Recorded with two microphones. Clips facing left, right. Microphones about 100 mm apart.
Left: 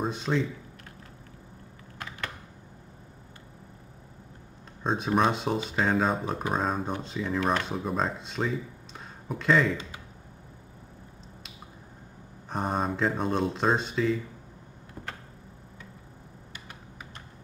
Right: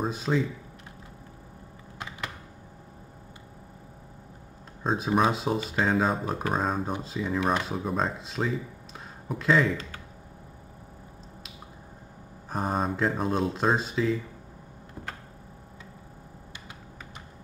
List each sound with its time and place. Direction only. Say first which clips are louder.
0.0 s speech: right 1 dB; centre (ahead or behind)
2.0 s computer keyboard: even; 15° right (ahead or behind)
4.8 s speech: right 1 dB; 5° right (ahead or behind)
12.4 s speech: right 1 dB; centre (ahead or behind)